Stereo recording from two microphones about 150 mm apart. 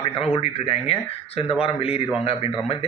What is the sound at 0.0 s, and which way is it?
A man's voice, 40° left (ahead or behind).